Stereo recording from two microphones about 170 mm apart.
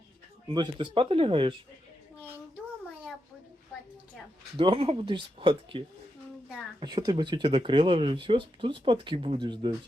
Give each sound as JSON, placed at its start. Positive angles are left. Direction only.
{"t": 0.4, "sound": "speech", "side_deg": -25}
{"t": 4.5, "sound": "speech", "side_deg": -30}